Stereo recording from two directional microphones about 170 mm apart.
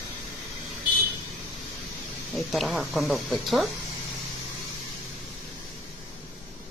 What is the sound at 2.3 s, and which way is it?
A woman's voice, centre (ahead or behind).